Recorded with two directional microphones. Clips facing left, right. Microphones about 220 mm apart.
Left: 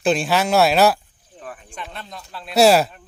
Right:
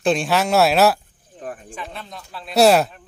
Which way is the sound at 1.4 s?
45° right (ahead or behind).